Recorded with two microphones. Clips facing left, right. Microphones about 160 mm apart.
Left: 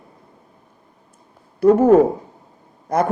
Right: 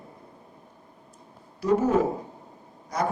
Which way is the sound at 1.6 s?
55° left (ahead or behind).